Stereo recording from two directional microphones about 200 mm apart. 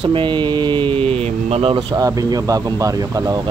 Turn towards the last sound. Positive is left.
turn(degrees=-20)  # may be behind; listen again after turning